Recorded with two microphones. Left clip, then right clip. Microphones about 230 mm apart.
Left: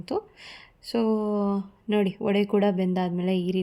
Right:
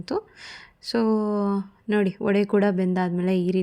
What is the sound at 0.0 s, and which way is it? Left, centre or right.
Speech, right.